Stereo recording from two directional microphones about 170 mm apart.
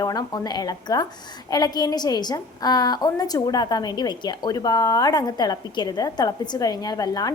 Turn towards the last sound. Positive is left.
turn(degrees=20)  # may be behind; listen again after turning